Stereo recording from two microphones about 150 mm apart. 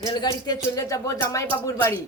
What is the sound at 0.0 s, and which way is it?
A woman's voice, 25° left (ahead or behind).